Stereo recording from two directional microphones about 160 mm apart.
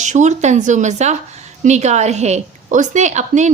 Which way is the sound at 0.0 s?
50° right (ahead or behind).